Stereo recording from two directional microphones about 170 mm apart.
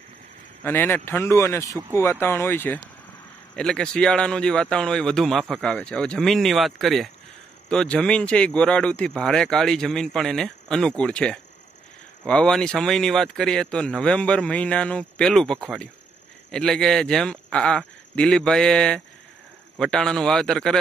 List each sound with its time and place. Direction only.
0.7 s speech: 10° left (ahead or behind)
1.6 s speech: 20° right (ahead or behind)
2.0 s speech: 15° left (ahead or behind)